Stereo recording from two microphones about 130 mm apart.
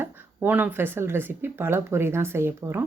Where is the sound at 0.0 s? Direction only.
15° right (ahead or behind).